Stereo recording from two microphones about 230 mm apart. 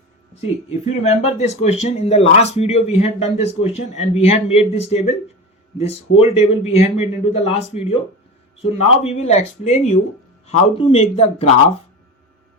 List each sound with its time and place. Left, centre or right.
1.0 s speech: left